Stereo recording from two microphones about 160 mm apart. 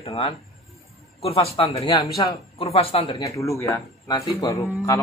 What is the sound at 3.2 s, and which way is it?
Speech, 20° left (ahead or behind).